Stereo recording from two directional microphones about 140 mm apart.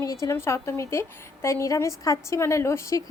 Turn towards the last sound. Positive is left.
turn(degrees=20)  # may be behind; listen again after turning